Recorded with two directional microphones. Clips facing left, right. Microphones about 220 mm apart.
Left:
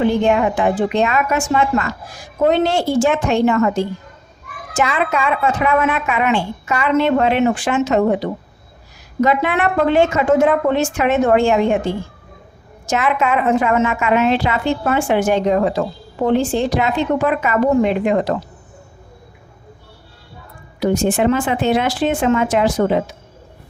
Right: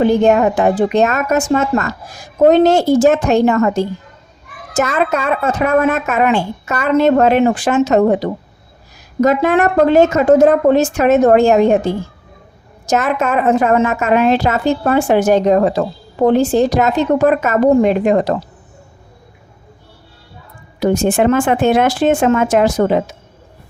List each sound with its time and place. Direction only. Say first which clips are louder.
0.0 s a woman's voice: right 4 dB; 40° right (ahead or behind)
20.7 s speech: right 3 dB; 45° right (ahead or behind)